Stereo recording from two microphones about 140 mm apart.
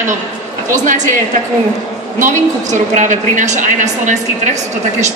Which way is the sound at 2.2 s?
60° right (ahead or behind).